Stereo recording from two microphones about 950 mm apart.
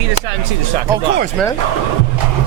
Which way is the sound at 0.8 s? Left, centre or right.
Centre.